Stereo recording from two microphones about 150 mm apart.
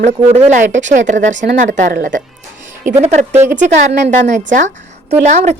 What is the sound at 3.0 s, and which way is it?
Speech, 45° right (ahead or behind).